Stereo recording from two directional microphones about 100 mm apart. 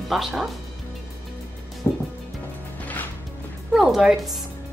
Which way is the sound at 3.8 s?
5° right (ahead or behind).